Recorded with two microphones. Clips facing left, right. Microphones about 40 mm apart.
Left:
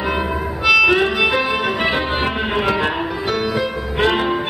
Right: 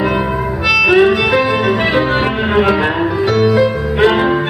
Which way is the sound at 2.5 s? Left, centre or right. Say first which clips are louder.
Right 7 dB; centre.